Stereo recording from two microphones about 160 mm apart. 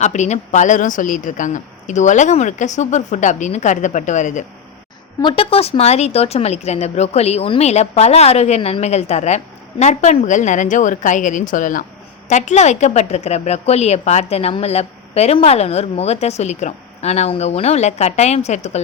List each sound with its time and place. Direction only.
0.0 s speech: 45° left (ahead or behind)
5.2 s speech: 35° left (ahead or behind)